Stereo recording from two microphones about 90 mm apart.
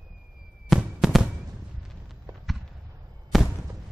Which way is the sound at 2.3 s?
35° right (ahead or behind).